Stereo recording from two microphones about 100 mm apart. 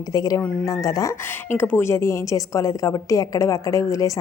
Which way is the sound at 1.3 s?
20° left (ahead or behind).